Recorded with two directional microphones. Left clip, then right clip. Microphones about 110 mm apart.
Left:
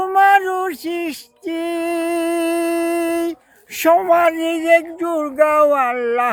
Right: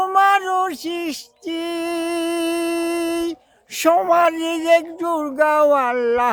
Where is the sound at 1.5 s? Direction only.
30° right (ahead or behind).